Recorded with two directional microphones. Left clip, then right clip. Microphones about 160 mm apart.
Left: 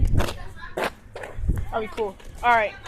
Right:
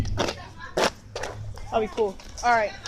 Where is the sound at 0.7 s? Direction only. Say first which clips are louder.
Right 4 dB; 65° right (ahead or behind).